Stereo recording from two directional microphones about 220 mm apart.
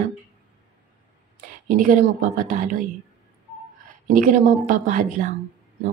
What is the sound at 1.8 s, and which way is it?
A woman's voice, 35° right (ahead or behind).